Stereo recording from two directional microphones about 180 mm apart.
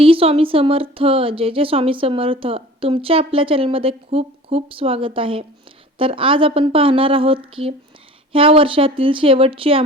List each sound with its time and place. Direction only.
0.0 s a woman's voice: 30° right (ahead or behind)